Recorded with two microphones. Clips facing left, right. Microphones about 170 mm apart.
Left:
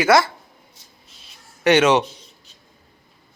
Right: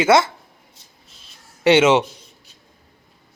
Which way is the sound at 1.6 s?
25° right (ahead or behind).